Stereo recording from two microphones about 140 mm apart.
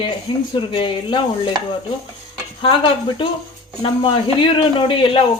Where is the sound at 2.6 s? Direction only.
40° left (ahead or behind).